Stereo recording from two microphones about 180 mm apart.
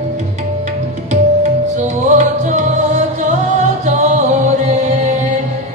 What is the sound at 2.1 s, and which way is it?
Music, 40° right (ahead or behind).